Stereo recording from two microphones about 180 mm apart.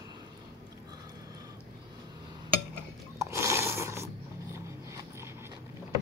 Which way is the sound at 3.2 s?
15° right (ahead or behind).